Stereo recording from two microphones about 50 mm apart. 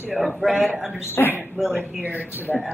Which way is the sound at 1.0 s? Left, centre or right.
Left.